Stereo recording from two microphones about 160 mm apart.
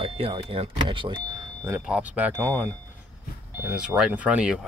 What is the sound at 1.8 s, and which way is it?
Speech, 10° right (ahead or behind).